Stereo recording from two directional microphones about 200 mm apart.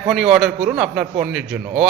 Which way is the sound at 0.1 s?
Centre (ahead or behind).